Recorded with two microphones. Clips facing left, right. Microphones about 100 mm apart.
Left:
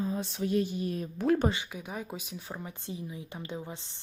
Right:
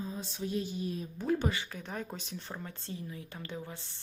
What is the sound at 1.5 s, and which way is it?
Speech, 15° left (ahead or behind).